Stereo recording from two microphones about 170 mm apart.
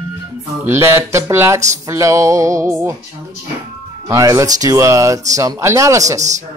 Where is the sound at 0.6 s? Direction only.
15° right (ahead or behind).